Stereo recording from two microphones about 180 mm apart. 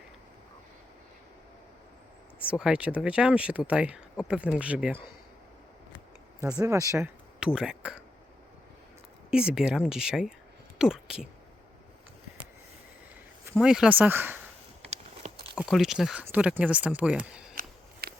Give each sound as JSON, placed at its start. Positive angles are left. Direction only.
{"t": 2.4, "sound": "speech", "side_deg": -5}
{"t": 6.4, "sound": "speech", "side_deg": -20}
{"t": 7.3, "sound": "speech", "side_deg": -5}
{"t": 9.3, "sound": "speech", "side_deg": -5}
{"t": 13.6, "sound": "speech", "side_deg": -5}
{"t": 14.8, "sound": "a sound", "side_deg": -35}
{"t": 15.5, "sound": "speech", "side_deg": 0}
{"t": 17.5, "sound": "scissors", "side_deg": -55}